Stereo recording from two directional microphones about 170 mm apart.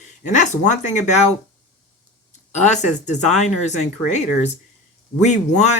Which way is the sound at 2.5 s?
45° left (ahead or behind).